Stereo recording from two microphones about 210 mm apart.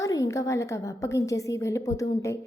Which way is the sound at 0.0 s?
15° left (ahead or behind).